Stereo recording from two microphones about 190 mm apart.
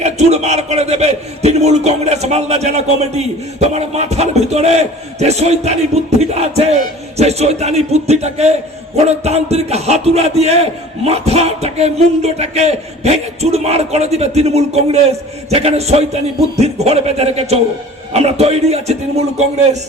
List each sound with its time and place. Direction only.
0.0 s a man's voice: 35° right (ahead or behind)